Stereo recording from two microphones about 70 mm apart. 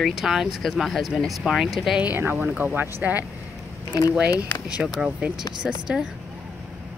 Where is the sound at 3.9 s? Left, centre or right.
Left.